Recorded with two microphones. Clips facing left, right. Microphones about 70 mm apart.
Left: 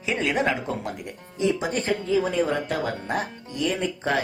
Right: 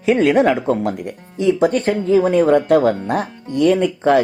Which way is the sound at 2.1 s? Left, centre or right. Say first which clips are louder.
Right 11 dB; right.